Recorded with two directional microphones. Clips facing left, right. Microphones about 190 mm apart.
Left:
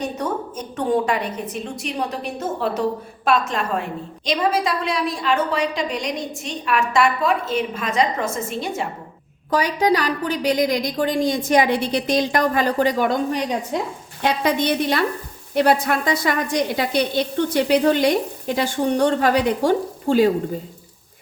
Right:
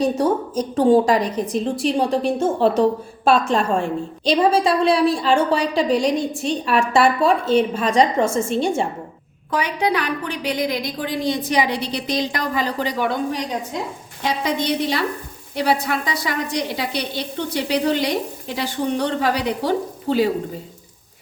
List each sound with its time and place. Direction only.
0.0 s a woman's voice: 30° right (ahead or behind)
9.5 s a woman's voice: 40° left (ahead or behind)
14.2 s a woman's voice: 60° left (ahead or behind)